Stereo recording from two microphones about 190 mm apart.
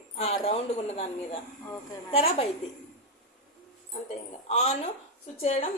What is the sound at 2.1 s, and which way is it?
Speech, 30° left (ahead or behind).